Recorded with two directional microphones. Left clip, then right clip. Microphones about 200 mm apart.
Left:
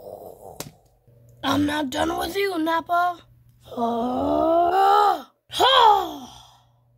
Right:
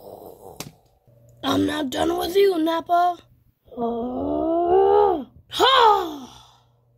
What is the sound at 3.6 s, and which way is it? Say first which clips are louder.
Groan: left 2 dB; 90° left.